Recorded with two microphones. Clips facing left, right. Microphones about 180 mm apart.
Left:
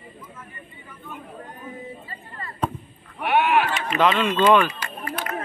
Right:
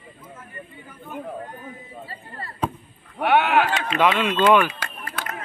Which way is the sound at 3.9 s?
10° right (ahead or behind).